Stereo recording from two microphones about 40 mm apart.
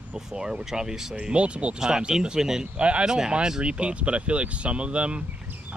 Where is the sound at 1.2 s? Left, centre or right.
Right.